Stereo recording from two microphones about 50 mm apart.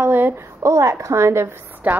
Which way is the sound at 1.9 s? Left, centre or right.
Right.